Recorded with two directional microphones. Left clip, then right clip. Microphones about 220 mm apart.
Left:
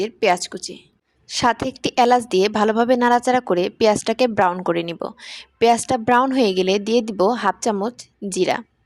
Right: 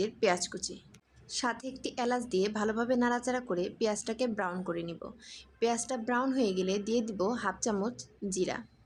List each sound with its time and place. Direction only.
0.0 s a woman's voice: 35° left (ahead or behind)